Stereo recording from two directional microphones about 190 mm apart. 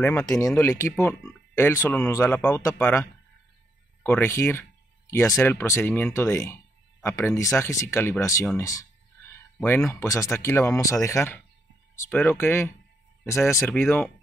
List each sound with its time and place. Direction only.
0.0 s speech: 15° left (ahead or behind)
9.6 s speech: 5° left (ahead or behind)
9.9 s speech: 15° left (ahead or behind)